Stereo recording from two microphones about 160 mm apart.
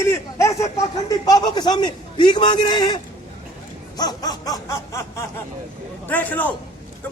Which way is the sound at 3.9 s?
25° left (ahead or behind).